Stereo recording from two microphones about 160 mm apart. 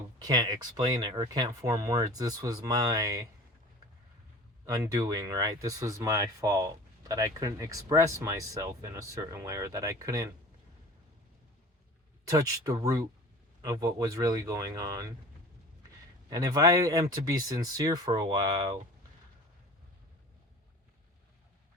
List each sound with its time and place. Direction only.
0.3 s speech: 25° right (ahead or behind)
4.6 s speech: 20° right (ahead or behind)
12.3 s speech: 25° right (ahead or behind)
16.3 s speech: 25° right (ahead or behind)